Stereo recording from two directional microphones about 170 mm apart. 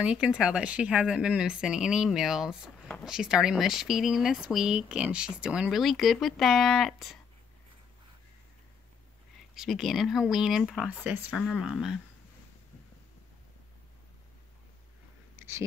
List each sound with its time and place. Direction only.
0.0 s speech: 5° right (ahead or behind)
9.6 s speech: centre (ahead or behind)
15.3 s a sound: 15° right (ahead or behind)